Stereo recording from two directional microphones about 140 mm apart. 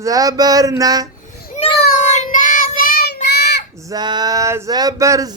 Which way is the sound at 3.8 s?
30° right (ahead or behind).